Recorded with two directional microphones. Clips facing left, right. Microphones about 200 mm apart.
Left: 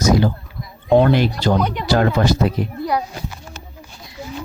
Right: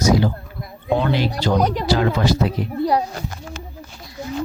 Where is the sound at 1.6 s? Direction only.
35° right (ahead or behind).